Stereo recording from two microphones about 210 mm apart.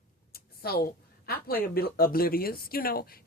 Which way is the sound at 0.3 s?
45° left (ahead or behind).